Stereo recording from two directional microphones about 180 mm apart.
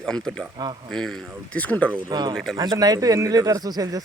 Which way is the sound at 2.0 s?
25° right (ahead or behind).